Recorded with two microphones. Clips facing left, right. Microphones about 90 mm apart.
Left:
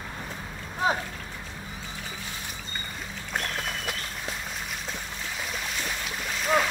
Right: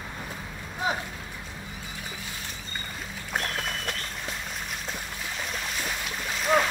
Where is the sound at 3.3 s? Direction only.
Centre (ahead or behind).